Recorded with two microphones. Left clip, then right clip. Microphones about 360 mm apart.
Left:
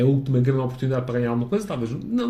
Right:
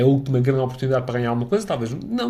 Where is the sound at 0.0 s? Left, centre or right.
Right.